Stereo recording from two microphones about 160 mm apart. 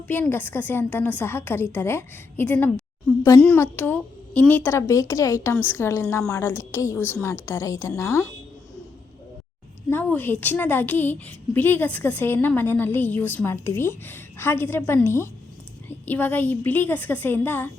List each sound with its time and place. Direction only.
0.1 s a woman's voice: 10° left (ahead or behind)
9.9 s a woman's voice: 10° left (ahead or behind)